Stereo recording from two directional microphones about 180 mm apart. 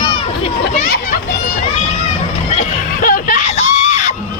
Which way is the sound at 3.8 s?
40° left (ahead or behind).